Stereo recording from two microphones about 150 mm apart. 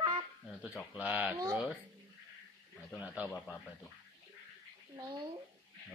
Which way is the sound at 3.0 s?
10° right (ahead or behind).